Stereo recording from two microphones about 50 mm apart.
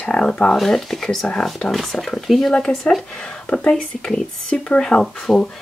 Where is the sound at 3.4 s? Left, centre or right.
Left.